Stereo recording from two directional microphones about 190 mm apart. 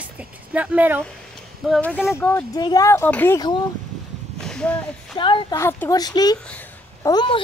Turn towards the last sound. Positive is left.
turn(degrees=20)  # may be behind; listen again after turning